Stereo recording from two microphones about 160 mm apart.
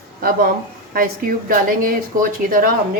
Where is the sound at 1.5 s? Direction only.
60° right (ahead or behind).